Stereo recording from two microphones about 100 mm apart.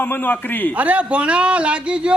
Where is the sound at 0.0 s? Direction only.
20° left (ahead or behind).